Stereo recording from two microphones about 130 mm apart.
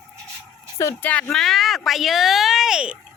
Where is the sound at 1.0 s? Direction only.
10° left (ahead or behind).